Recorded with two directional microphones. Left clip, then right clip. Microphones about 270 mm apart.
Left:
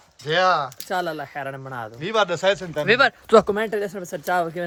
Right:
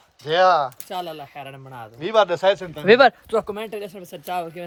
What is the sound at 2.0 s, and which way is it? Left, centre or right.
Speech, centre.